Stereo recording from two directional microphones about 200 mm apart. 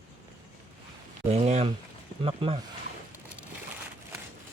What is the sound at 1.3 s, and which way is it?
Speech, 30° right (ahead or behind).